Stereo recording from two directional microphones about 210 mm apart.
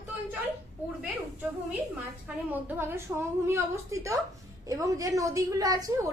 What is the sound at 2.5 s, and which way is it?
A woman's voice, 10° right (ahead or behind).